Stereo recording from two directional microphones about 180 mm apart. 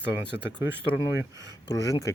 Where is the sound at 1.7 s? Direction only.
20° left (ahead or behind).